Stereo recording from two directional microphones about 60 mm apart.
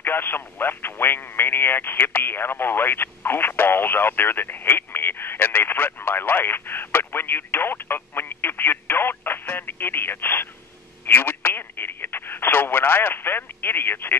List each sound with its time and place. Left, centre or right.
0.0 s speech: left